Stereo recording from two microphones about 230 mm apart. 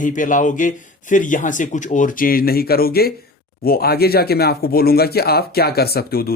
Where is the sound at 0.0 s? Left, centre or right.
Left.